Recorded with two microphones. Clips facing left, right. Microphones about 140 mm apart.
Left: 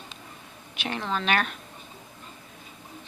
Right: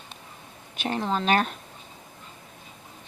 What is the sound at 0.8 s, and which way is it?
Speech, 35° right (ahead or behind).